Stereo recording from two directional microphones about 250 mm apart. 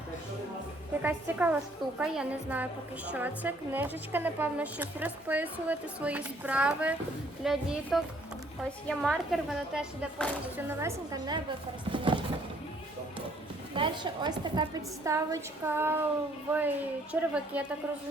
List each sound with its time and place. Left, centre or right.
1.0 s a woman's voice: centre
11.9 s a sound: centre
13.7 s a woman's voice: centre